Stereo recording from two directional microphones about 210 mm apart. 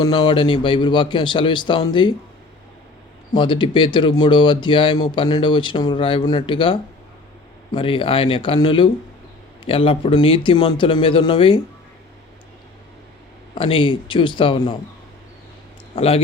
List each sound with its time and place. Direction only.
0.0 s speech: 20° left (ahead or behind)
3.3 s speech: 25° left (ahead or behind)
13.5 s speech: 25° left (ahead or behind)
16.0 s speech: 25° left (ahead or behind)